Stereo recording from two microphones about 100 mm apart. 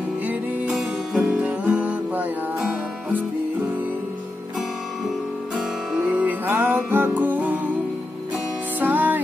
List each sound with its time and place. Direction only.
0.3 s music: 15° right (ahead or behind)
6.0 s music: 15° right (ahead or behind)
8.7 s music: 15° right (ahead or behind)